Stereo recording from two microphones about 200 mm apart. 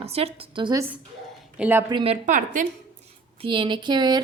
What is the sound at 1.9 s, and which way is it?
Speech, 30° right (ahead or behind).